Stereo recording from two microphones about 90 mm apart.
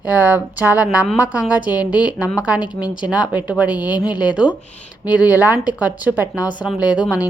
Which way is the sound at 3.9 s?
50° left (ahead or behind).